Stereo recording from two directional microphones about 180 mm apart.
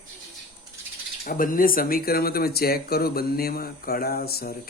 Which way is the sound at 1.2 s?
50° left (ahead or behind).